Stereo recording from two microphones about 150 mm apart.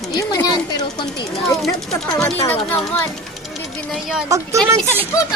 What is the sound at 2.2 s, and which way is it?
Speech, 15° left (ahead or behind).